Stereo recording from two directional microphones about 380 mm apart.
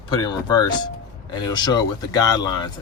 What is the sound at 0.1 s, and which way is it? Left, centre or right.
Speech, centre.